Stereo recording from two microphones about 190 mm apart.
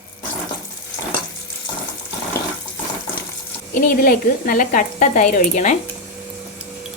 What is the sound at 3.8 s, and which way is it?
Frying, 50° left (ahead or behind).